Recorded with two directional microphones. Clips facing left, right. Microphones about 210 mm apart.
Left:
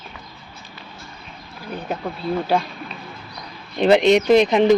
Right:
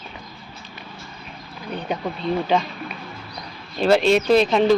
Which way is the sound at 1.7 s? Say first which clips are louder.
Right 1 dB; 5° left (ahead or behind).